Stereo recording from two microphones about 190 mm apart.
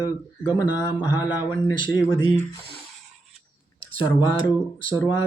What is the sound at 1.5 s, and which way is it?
Speech, 25° left (ahead or behind).